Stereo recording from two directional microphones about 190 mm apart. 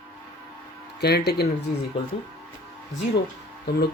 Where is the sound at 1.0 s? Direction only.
60° left (ahead or behind).